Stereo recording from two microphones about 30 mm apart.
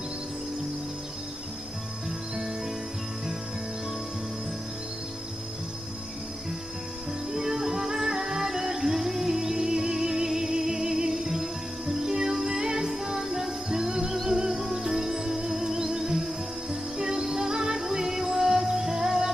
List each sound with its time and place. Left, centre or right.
7.3 s music: centre